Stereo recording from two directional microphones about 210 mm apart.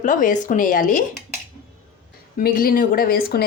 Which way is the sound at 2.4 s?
45° left (ahead or behind).